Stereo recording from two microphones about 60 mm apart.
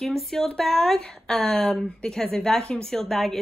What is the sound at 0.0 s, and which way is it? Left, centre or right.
Speech, centre.